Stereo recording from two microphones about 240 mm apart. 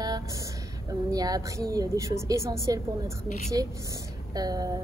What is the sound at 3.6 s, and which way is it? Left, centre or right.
A woman's voice, centre.